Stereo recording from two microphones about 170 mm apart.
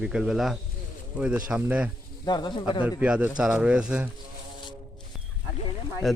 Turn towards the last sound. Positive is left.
turn(degrees=0)  # may be behind; listen again after turning